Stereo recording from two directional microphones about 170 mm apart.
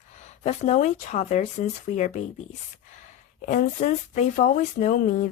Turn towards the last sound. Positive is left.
turn(degrees=50)  # may be behind; listen again after turning